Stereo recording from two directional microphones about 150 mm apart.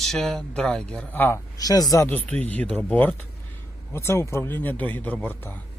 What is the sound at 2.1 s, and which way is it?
Speech, 10° left (ahead or behind).